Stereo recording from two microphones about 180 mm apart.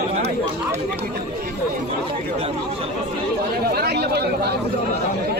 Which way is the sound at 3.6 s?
60° right (ahead or behind).